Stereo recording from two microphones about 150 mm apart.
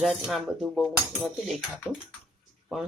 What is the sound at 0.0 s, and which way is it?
Speech, centre (ahead or behind).